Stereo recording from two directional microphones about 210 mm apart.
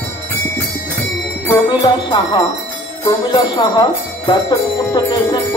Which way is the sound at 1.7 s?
20° left (ahead or behind).